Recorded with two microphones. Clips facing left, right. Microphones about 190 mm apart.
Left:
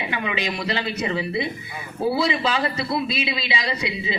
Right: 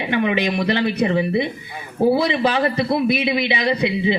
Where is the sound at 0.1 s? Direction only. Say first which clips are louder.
Right 12 dB; 55° right (ahead or behind).